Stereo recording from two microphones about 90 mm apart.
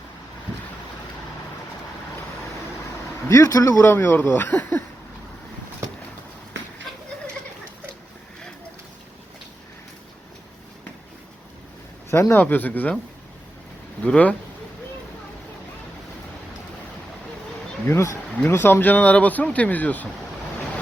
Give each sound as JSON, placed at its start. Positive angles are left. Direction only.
{"t": 3.2, "sound": "speech", "side_deg": 40}
{"t": 3.8, "sound": "speech", "side_deg": 20}
{"t": 12.1, "sound": "speech", "side_deg": 25}
{"t": 14.0, "sound": "speech", "side_deg": 15}
{"t": 17.8, "sound": "speech", "side_deg": 30}